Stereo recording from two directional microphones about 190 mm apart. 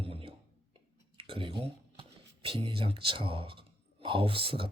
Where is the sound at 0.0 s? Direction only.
30° right (ahead or behind).